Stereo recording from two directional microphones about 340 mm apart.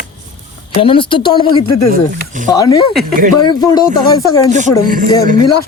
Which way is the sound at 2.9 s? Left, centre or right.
Centre.